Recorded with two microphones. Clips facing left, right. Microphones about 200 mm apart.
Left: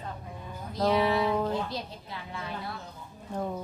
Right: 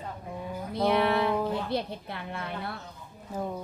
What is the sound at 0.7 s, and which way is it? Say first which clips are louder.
Speech: even; 60° right (ahead or behind).